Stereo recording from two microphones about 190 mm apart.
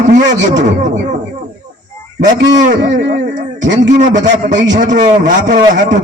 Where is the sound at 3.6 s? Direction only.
70° right (ahead or behind).